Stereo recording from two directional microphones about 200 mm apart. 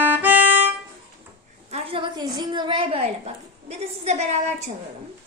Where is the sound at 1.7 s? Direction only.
25° right (ahead or behind).